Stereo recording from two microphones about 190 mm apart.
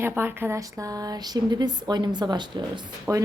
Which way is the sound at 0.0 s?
10° right (ahead or behind).